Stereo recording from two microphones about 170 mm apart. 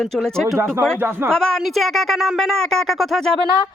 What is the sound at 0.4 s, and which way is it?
Speech, 20° right (ahead or behind).